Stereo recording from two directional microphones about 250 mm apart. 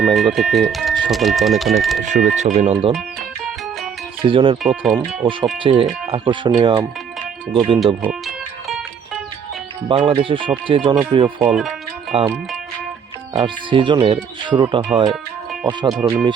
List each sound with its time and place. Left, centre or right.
0.0 s speech: centre
2.0 s speech: right
4.2 s speech: right
4.6 s speech: centre
4.9 s speech: centre
8.6 s music: centre
9.9 s speech: right
11.4 s speech: centre
12.1 s speech: right
13.3 s speech: centre
15.9 s speech: centre